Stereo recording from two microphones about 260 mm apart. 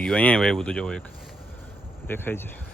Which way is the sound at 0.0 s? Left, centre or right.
Centre.